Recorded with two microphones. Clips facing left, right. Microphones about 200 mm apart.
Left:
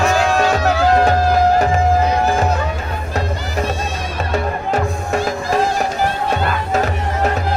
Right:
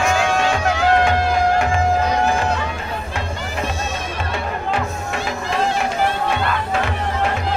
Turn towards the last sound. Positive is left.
turn(degrees=40)  # may be behind; listen again after turning